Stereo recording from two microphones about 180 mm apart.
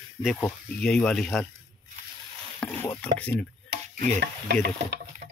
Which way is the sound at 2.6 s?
10° left (ahead or behind).